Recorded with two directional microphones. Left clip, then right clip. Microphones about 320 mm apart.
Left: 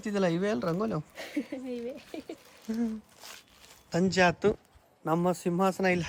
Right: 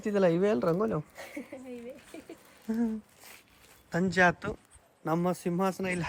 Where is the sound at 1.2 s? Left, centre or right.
Left.